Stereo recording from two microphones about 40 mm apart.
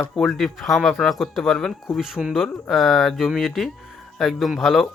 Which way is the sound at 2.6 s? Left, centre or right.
Centre.